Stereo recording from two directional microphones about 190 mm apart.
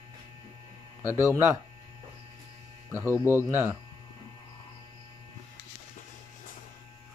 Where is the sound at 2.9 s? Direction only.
15° right (ahead or behind).